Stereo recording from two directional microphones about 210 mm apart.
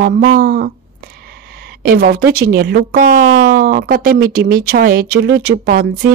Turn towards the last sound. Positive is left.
turn(degrees=-45)  # may be behind; listen again after turning